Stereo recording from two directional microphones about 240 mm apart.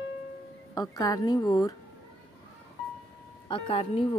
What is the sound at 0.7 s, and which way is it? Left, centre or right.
Speech, centre.